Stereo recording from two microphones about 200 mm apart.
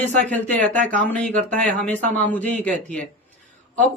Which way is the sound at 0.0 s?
5° left (ahead or behind).